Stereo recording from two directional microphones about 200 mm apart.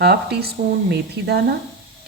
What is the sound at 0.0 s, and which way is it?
Speech, 55° right (ahead or behind).